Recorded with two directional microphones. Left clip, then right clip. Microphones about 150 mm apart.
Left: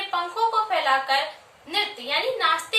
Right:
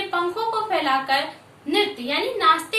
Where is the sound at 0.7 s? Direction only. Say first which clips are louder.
Right 1 dB; 5° left (ahead or behind).